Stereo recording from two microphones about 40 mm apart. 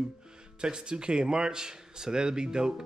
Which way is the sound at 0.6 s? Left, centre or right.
Right.